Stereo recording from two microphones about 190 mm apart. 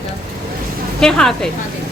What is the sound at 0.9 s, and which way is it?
Speech, 5° left (ahead or behind).